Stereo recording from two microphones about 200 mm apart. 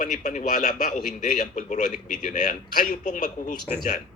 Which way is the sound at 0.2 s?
40° left (ahead or behind).